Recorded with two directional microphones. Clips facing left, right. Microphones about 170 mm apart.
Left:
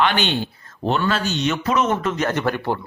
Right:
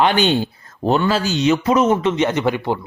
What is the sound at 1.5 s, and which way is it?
Speech, 35° right (ahead or behind).